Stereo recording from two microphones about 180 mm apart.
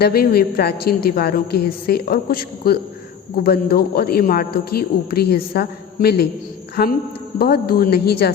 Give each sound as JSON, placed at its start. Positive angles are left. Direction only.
{"t": 0.0, "sound": "a man's voice", "side_deg": 60}
{"t": 7.3, "sound": "a man's voice", "side_deg": 55}